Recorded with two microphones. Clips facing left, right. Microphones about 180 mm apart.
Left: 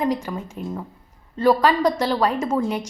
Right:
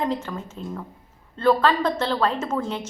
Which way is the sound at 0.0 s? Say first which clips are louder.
Left 3 dB; 10° left (ahead or behind).